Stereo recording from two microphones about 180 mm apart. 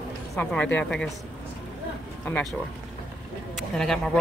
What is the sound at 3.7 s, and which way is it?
Speech, 5° left (ahead or behind).